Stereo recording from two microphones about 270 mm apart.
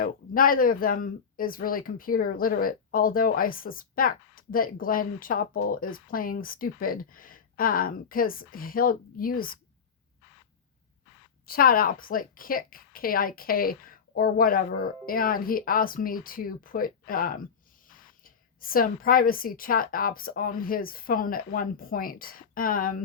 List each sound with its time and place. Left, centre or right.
0.0 s speech: left
11.4 s speech: left